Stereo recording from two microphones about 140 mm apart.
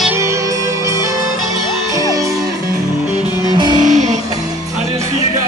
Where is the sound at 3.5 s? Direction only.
30° right (ahead or behind).